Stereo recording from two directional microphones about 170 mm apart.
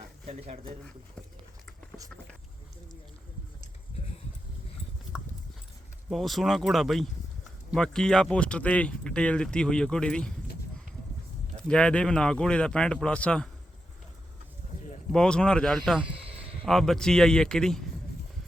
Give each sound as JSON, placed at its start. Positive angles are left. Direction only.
{"t": 0.3, "sound": "speech", "side_deg": -35}
{"t": 5.1, "sound": "dog", "side_deg": -5}
{"t": 6.1, "sound": "speech", "side_deg": 0}
{"t": 11.7, "sound": "speech", "side_deg": 5}
{"t": 15.1, "sound": "speech", "side_deg": 5}